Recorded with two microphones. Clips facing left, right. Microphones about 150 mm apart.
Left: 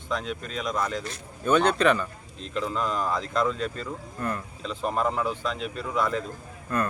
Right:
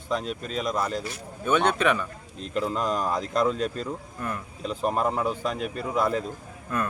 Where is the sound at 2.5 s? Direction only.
40° right (ahead or behind).